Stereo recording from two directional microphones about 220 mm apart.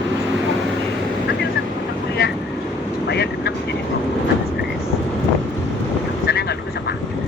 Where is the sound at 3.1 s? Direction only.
50° left (ahead or behind).